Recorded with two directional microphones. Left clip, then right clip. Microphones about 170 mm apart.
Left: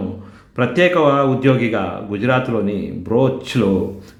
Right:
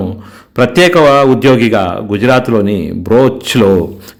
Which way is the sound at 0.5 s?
50° right (ahead or behind).